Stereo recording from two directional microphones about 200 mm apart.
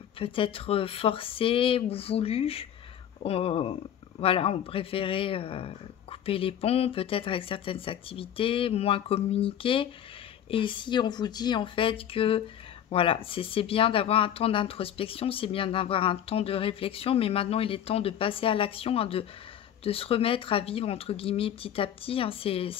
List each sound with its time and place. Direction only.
0.2 s speech: 25° left (ahead or behind)